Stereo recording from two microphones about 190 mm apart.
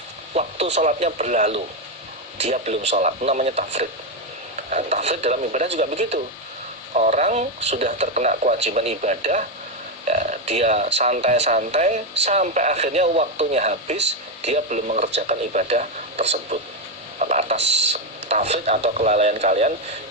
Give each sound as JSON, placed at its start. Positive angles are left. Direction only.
{"t": 0.3, "sound": "speech", "side_deg": -35}